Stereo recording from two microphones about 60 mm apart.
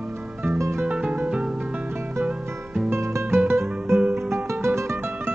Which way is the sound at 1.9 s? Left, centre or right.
Right.